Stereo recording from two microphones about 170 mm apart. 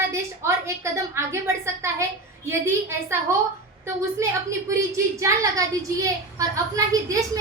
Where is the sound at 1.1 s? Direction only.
15° right (ahead or behind).